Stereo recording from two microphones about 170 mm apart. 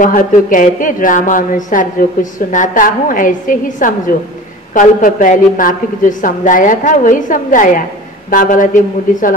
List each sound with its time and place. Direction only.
0.0 s a woman's voice: 50° left (ahead or behind)